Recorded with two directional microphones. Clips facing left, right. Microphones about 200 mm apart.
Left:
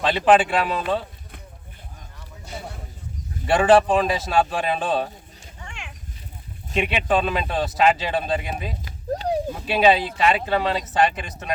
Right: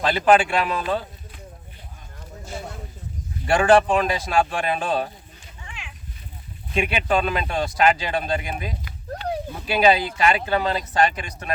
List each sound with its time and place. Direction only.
0.0 s speech: centre (ahead or behind)
3.4 s speech: 5° left (ahead or behind)
5.5 s a sound: 50° left (ahead or behind)
6.7 s speech: centre (ahead or behind)